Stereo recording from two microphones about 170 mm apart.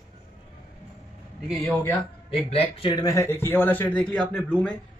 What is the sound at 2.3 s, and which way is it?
A man's voice, 35° left (ahead or behind).